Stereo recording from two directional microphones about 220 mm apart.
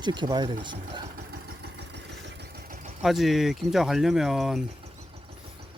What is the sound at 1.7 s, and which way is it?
Vehicle, 50° right (ahead or behind).